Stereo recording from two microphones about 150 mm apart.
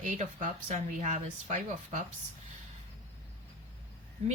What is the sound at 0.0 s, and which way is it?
Speech, 55° right (ahead or behind).